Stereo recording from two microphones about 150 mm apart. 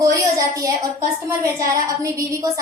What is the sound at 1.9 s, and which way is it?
Speech, 20° right (ahead or behind).